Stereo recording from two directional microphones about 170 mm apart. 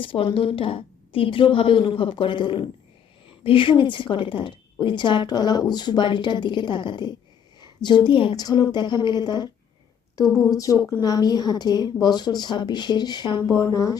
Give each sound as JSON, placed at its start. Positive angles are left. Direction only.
{"t": 0.0, "sound": "a woman's voice", "side_deg": 30}
{"t": 10.3, "sound": "speech", "side_deg": 0}
{"t": 10.6, "sound": "a woman's voice", "side_deg": 20}